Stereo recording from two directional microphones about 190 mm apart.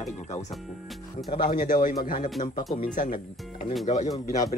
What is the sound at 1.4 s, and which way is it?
A man's voice, 45° left (ahead or behind).